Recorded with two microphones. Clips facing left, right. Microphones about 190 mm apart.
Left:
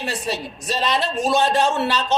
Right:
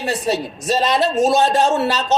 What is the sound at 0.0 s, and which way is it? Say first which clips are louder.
Speech: right 6 dB; 40° right (ahead or behind).